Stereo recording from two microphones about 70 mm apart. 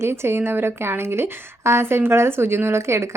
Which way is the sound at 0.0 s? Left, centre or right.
Right.